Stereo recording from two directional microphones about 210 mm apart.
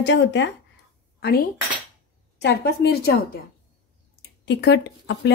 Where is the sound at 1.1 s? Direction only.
50° left (ahead or behind).